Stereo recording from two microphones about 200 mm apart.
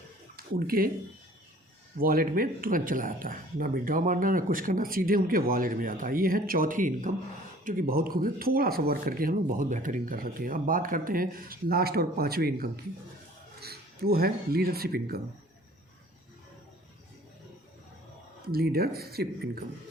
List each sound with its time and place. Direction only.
0.3 s speech: 50° right (ahead or behind)
2.0 s speech: 45° right (ahead or behind)
18.4 s speech: 50° right (ahead or behind)